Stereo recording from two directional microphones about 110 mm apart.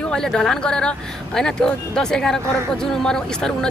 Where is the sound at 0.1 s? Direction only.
5° left (ahead or behind).